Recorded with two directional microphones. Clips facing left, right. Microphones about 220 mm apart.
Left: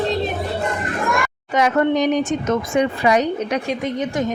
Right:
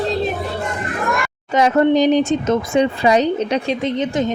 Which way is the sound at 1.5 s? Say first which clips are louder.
Right 3 dB; 30° right (ahead or behind).